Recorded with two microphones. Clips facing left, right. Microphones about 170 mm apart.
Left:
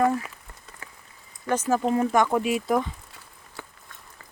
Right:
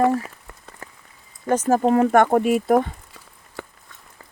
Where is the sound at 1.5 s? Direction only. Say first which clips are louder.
Right 5 dB; 45° right (ahead or behind).